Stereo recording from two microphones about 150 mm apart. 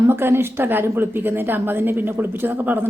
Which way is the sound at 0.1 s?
15° right (ahead or behind).